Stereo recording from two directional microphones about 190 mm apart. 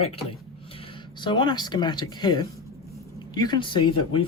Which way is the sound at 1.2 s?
25° left (ahead or behind).